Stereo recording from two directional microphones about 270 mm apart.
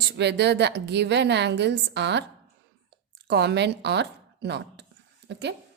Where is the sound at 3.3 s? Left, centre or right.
Right.